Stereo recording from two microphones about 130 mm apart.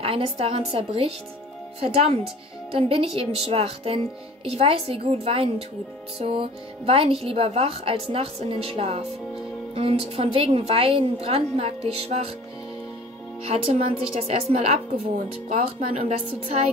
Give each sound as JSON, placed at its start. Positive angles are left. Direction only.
{"t": 0.0, "sound": "speech", "side_deg": -45}
{"t": 2.7, "sound": "speech", "side_deg": -45}
{"t": 13.4, "sound": "speech", "side_deg": -50}